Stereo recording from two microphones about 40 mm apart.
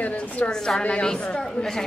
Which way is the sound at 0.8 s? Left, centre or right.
Left.